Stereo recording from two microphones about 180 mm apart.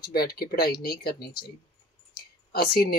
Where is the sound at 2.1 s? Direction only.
55° left (ahead or behind).